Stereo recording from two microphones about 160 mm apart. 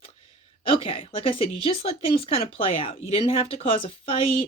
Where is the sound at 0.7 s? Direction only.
35° left (ahead or behind).